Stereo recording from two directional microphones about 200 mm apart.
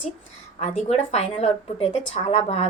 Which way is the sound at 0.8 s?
30° left (ahead or behind).